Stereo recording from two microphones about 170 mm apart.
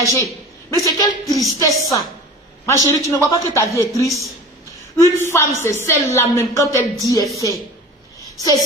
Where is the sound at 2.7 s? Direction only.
15° left (ahead or behind).